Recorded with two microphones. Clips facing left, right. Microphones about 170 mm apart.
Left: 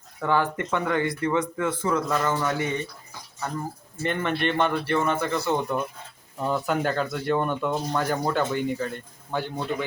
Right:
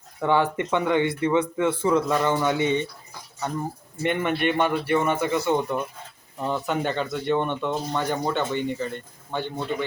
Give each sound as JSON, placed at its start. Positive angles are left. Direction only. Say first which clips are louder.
{"t": 0.2, "sound": "speech", "louder": "right 2 dB", "side_deg": -20}
{"t": 4.0, "sound": "a man's voice", "louder": "right 2 dB", "side_deg": -5}